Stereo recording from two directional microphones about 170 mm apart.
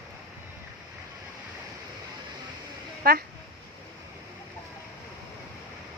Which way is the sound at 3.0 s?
65° right (ahead or behind).